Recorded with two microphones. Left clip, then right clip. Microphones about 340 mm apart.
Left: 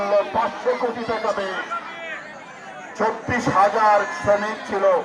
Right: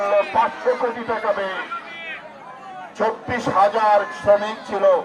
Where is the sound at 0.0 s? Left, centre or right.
Right.